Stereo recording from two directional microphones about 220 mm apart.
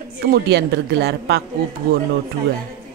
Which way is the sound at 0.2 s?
45° right (ahead or behind).